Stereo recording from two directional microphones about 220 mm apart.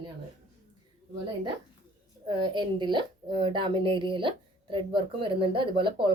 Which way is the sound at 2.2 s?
20° right (ahead or behind).